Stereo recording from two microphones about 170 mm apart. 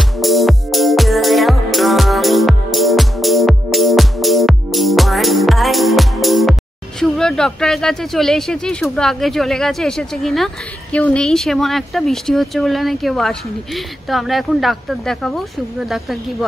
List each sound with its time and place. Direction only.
0.2 s music: centre (ahead or behind)
7.0 s speech: 5° left (ahead or behind)